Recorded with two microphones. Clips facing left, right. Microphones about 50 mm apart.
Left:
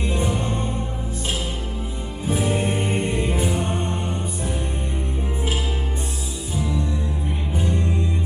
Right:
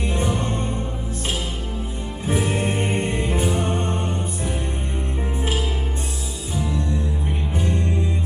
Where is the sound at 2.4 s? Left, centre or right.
Centre.